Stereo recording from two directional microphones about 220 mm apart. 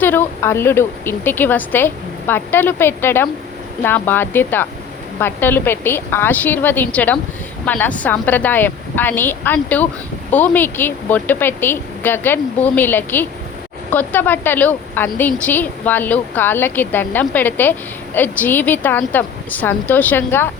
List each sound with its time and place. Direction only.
0.0 s a woman's voice: 10° left (ahead or behind)